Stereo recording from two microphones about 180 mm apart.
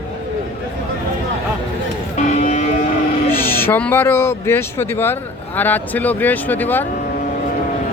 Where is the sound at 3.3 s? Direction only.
10° left (ahead or behind).